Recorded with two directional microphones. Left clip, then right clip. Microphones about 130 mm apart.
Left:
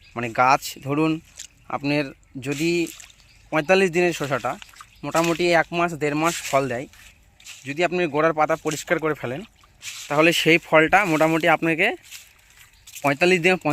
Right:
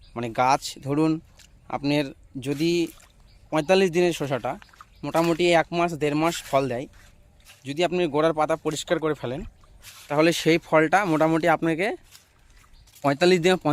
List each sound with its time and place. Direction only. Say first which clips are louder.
0.1 s speech: left 3 dB; 5° right (ahead or behind)
8.4 s speech: left 2 dB; 10° left (ahead or behind)
13.0 s speech: left 1 dB; 15° right (ahead or behind)